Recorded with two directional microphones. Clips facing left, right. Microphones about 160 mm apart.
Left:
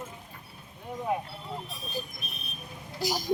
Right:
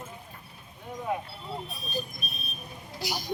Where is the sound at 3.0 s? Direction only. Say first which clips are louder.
Left 4 dB; 45° left (ahead or behind).